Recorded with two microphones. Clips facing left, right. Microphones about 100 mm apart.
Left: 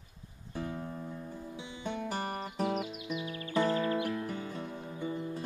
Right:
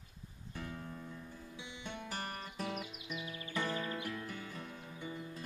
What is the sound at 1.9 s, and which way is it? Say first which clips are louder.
Music: left 8 dB; 25° left (ahead or behind).